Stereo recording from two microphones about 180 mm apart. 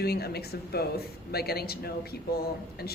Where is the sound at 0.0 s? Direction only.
60° left (ahead or behind).